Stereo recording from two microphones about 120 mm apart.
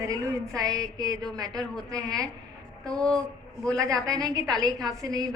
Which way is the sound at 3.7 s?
30° right (ahead or behind).